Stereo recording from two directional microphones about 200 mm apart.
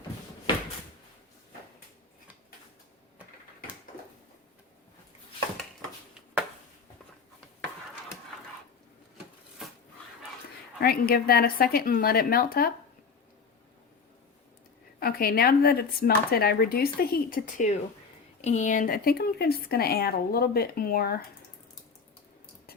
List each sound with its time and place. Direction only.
10.8 s speech: 50° left (ahead or behind)
14.9 s speech: 50° left (ahead or behind)